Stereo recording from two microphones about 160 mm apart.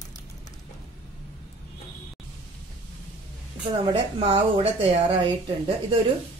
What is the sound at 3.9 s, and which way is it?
A woman's voice, 30° right (ahead or behind).